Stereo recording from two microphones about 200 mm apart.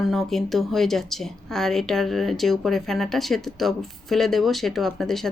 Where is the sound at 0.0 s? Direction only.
Centre (ahead or behind).